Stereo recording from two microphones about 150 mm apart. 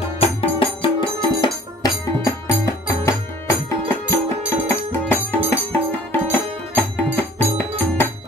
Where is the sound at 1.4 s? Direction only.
25° left (ahead or behind).